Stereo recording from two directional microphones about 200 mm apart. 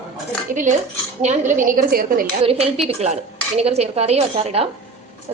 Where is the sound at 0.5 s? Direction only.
40° right (ahead or behind).